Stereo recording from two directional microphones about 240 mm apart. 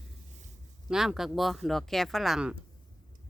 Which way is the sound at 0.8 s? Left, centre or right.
Centre.